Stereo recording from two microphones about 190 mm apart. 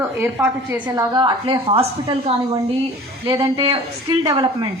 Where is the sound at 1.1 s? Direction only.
25° right (ahead or behind).